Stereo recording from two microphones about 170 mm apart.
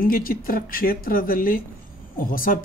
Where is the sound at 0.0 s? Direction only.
60° left (ahead or behind).